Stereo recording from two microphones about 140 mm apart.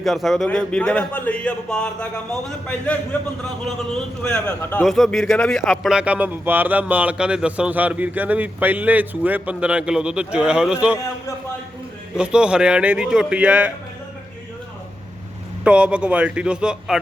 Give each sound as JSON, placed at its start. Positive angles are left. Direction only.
{"t": 0.0, "sound": "a man's voice", "side_deg": 0}
{"t": 12.1, "sound": "a man's voice", "side_deg": -5}
{"t": 15.6, "sound": "a man's voice", "side_deg": -10}